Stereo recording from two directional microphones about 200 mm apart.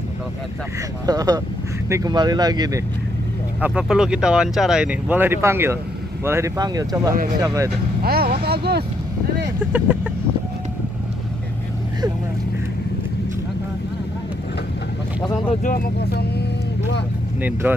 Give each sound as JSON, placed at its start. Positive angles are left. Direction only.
{"t": 1.0, "sound": "speech", "side_deg": -20}
{"t": 3.6, "sound": "speech", "side_deg": -5}
{"t": 8.0, "sound": "vehicle", "side_deg": -50}
{"t": 9.7, "sound": "speech", "side_deg": -5}
{"t": 15.6, "sound": "speech", "side_deg": 50}
{"t": 17.4, "sound": "speech", "side_deg": -10}